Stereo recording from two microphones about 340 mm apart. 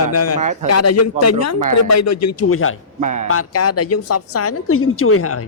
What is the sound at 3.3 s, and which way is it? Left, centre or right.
Speech, left.